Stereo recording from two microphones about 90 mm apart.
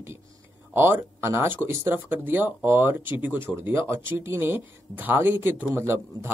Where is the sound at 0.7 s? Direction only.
25° right (ahead or behind).